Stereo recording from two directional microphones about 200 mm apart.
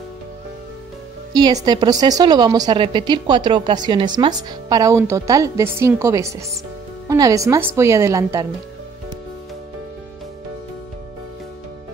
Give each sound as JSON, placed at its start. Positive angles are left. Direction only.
{"t": 1.3, "sound": "a woman's voice", "side_deg": -20}